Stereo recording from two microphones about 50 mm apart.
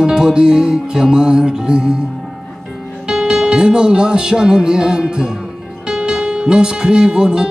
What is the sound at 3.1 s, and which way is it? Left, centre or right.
Music, centre.